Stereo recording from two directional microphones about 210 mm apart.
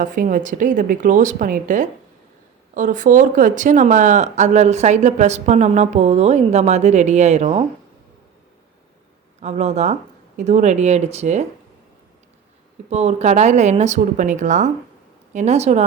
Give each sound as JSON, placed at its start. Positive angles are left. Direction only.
{"t": 0.0, "sound": "speech", "side_deg": -40}
{"t": 9.4, "sound": "speech", "side_deg": -30}
{"t": 12.9, "sound": "speech", "side_deg": -30}